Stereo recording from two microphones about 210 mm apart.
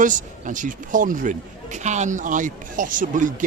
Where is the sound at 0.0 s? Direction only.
40° right (ahead or behind).